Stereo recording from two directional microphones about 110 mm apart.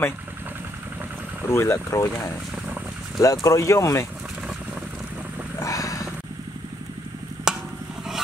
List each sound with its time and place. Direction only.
1.5 s speech: 25° left (ahead or behind)
5.6 s vehicle: 30° left (ahead or behind)
7.5 s a sound: 5° right (ahead or behind)